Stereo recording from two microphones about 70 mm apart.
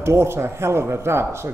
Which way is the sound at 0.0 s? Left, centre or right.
Right.